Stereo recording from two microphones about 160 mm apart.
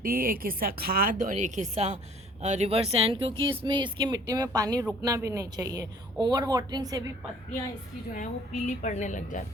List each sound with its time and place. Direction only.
0.0 s a woman's voice: 65° right (ahead or behind); by 7.1 s 25° right (ahead or behind)
8.1 s a woman's voice: 50° left (ahead or behind)